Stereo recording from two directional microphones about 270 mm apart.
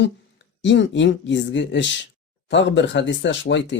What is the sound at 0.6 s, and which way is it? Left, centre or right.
Speech, left.